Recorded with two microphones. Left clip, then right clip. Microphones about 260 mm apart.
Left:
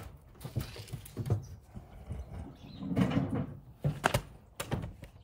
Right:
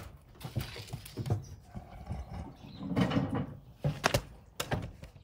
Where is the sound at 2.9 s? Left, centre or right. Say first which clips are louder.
Right 1 dB; centre.